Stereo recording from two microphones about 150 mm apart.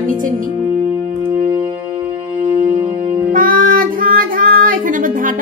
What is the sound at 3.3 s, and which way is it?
Music, 65° right (ahead or behind).